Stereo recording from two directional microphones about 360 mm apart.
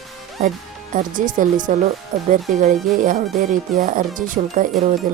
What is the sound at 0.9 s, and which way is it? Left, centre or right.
Speech, right.